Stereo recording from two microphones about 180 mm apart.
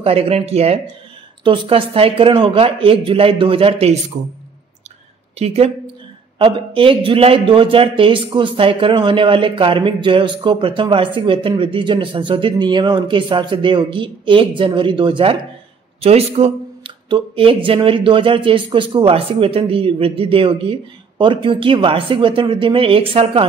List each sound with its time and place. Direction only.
0.0 s a man's voice: 30° right (ahead or behind)
5.4 s a man's voice: 35° right (ahead or behind)